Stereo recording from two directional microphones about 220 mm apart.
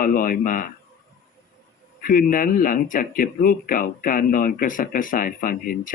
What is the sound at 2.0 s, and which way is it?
Speech, 40° left (ahead or behind).